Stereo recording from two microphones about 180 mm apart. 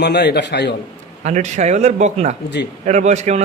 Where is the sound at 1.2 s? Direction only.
40° right (ahead or behind).